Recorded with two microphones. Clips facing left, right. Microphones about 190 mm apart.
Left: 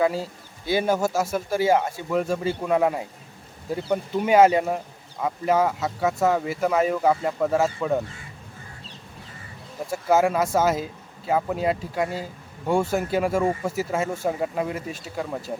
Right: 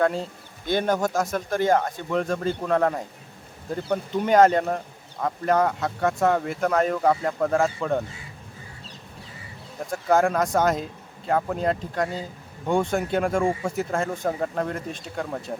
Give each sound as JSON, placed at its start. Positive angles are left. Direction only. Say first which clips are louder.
{"t": 0.0, "sound": "speech", "louder": "even", "side_deg": 5}
{"t": 9.8, "sound": "speech", "louder": "left 1 dB", "side_deg": 5}